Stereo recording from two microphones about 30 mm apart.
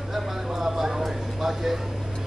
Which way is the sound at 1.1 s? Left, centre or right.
Centre.